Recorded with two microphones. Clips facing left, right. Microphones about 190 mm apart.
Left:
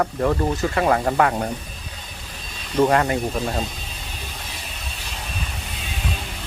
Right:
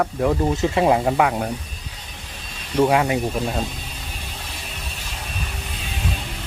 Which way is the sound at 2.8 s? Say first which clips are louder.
Even; 5° right (ahead or behind).